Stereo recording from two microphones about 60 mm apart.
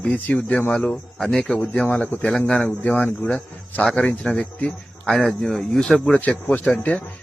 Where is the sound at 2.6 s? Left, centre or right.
Left.